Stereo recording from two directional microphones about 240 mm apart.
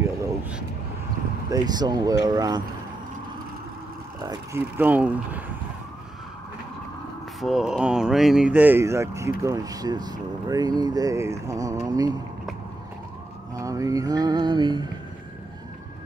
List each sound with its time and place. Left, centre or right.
0.0 s vehicle: centre
1.5 s speech: centre
4.2 s speech: centre
7.3 s speech: centre
13.6 s speech: centre